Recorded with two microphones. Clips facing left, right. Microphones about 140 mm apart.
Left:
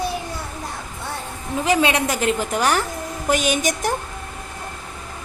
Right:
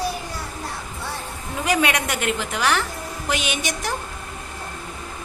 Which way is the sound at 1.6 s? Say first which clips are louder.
Left 3 dB; 25° left (ahead or behind).